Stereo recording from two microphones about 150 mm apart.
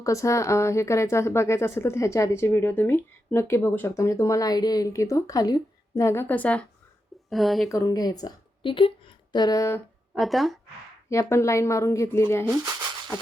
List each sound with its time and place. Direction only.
0.0 s a woman's voice: 20° left (ahead or behind); by 7.7 s centre (ahead or behind)
7.7 s a woman's voice: 20° left (ahead or behind)
10.2 s speech: centre (ahead or behind)
11.1 s a woman's voice: 20° left (ahead or behind)